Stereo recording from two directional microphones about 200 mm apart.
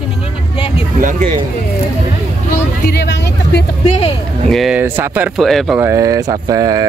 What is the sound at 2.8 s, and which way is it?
Speech, 55° left (ahead or behind).